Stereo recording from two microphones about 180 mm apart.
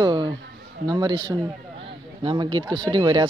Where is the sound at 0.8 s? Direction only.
20° right (ahead or behind).